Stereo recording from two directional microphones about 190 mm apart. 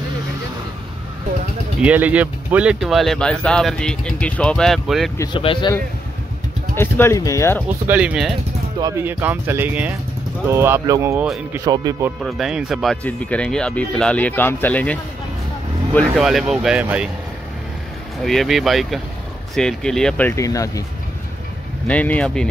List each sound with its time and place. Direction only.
1.8 s speech: 5° right (ahead or behind)
5.1 s speech: 15° left (ahead or behind)
6.7 s speech: 10° left (ahead or behind)
7.6 s speech: 10° right (ahead or behind)
8.7 s speech: 15° right (ahead or behind)
11.2 s speech: centre (ahead or behind)
11.6 s speech: 20° right (ahead or behind)
12.2 s speech: centre (ahead or behind)
18.2 s speech: centre (ahead or behind); by 20.8 s 15° left (ahead or behind)
21.8 s speech: 5° left (ahead or behind)